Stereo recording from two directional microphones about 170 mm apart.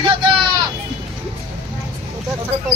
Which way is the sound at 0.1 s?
30° right (ahead or behind).